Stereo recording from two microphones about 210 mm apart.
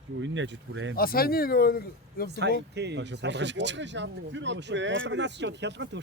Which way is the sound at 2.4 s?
55° right (ahead or behind).